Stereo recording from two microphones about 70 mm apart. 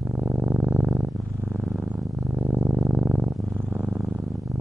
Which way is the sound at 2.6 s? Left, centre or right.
Centre.